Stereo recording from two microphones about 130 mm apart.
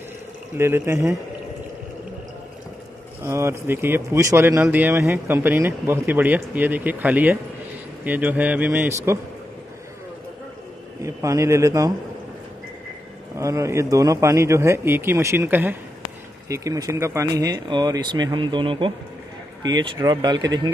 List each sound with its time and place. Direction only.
0.6 s speech: 20° right (ahead or behind)
3.2 s speech: 20° right (ahead or behind)
11.0 s a man's voice: 25° right (ahead or behind)
13.4 s speech: 25° right (ahead or behind)